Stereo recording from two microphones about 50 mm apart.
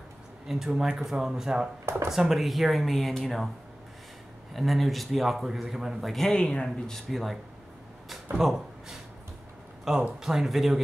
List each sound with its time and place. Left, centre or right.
0.5 s speech: centre
4.6 s speech: centre
6.3 s speech: centre
7.1 s speech: centre
8.4 s speech: centre